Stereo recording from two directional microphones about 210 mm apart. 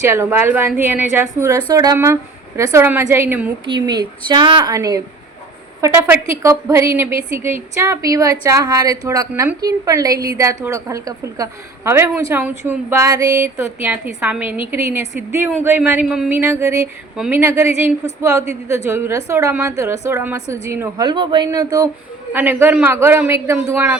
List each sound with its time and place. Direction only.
0.0 s a woman's voice: 10° right (ahead or behind)
3.7 s a woman's voice: 20° right (ahead or behind); by 16.4 s 5° right (ahead or behind)
16.4 s a woman's voice: 15° right (ahead or behind)